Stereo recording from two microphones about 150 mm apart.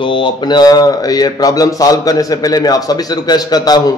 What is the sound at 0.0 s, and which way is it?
A man's voice, 35° left (ahead or behind).